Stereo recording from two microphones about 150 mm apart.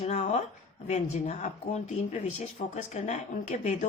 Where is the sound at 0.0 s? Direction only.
50° left (ahead or behind).